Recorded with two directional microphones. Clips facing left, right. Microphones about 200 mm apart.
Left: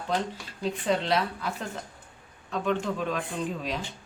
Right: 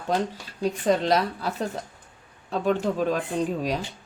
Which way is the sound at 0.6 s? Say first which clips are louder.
Right 5 dB; 40° right (ahead or behind).